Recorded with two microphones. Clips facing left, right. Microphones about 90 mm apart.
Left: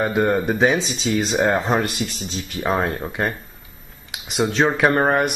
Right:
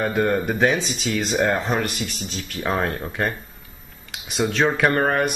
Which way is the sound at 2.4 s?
15° left (ahead or behind).